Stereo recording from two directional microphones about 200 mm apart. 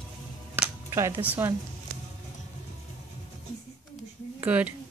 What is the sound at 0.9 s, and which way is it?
Speech, 15° right (ahead or behind).